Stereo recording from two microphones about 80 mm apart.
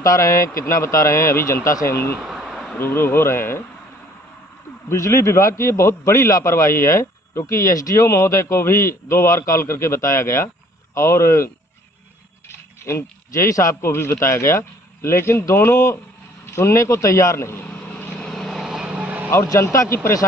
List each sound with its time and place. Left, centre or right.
0.0 s a man's voice: left
2.2 s a sound: centre
2.8 s speech: left
4.8 s a man's voice: left
17.6 s vehicle: centre
18.9 s vehicle: centre
19.3 s a man's voice: left